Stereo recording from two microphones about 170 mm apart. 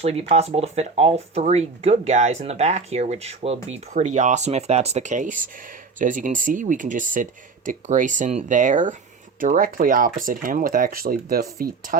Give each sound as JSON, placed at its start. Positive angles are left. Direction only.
{"t": 0.0, "sound": "speech", "side_deg": -40}